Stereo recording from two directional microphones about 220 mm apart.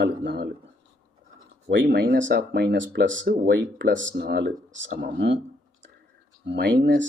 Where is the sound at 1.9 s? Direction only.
50° right (ahead or behind).